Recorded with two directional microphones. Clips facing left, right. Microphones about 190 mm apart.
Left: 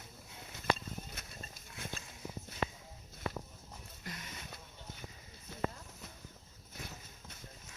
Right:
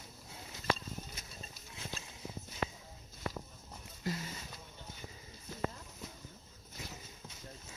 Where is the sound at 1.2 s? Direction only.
65° left (ahead or behind).